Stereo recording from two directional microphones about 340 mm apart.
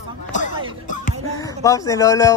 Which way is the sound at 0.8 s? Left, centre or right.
Left.